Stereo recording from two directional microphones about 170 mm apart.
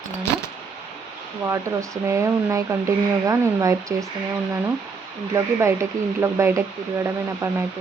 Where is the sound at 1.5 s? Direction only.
20° right (ahead or behind).